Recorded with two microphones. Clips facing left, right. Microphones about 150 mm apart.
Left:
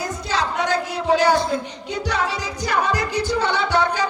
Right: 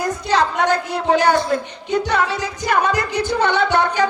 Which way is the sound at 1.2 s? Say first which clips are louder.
Right 2 dB; 55° right (ahead or behind).